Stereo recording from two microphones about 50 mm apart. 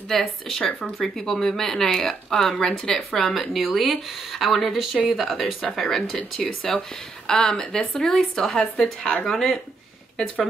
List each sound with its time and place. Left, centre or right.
0.1 s speech: centre
0.7 s speech: left
0.9 s speech: centre